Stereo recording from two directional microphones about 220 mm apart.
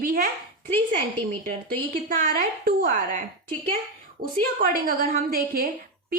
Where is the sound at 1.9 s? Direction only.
40° right (ahead or behind).